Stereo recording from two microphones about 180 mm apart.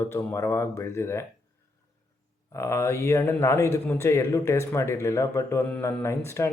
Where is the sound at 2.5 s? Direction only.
15° left (ahead or behind).